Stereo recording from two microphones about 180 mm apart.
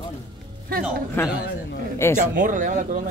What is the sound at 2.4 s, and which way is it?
Speech, 45° right (ahead or behind).